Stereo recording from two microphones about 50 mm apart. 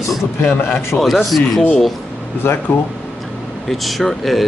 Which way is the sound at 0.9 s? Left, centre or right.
Left.